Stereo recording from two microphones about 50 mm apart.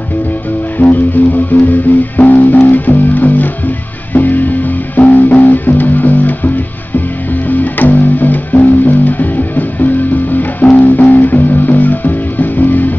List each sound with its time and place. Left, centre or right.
0.7 s music: left